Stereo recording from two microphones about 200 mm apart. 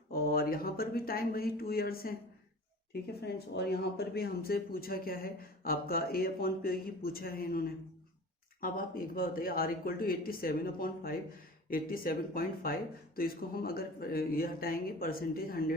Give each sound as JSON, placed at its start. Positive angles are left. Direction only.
{"t": 0.1, "sound": "speech", "side_deg": 50}